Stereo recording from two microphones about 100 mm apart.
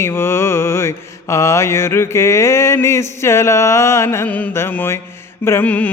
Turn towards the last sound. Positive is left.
turn(degrees=20)  # may be behind; listen again after turning